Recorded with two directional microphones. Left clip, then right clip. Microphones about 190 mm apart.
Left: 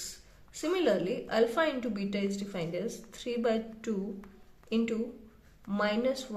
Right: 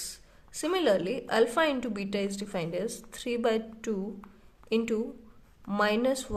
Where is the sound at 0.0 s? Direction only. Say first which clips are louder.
Right 2 dB; 35° right (ahead or behind).